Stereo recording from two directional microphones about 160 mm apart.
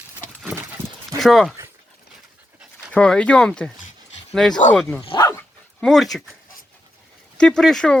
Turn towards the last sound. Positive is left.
turn(degrees=5)  # may be behind; listen again after turning